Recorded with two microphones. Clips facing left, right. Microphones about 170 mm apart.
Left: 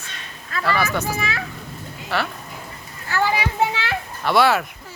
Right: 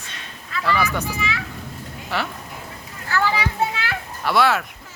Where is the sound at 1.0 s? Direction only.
45° left (ahead or behind).